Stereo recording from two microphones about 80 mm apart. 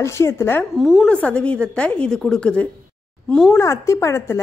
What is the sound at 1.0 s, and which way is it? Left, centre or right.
A woman's voice, centre.